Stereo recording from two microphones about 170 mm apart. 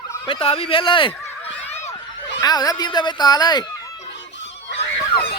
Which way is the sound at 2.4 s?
25° left (ahead or behind).